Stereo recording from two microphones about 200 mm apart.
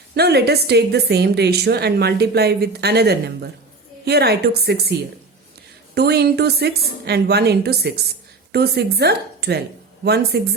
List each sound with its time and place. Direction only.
0.1 s a woman's voice: 55° right (ahead or behind)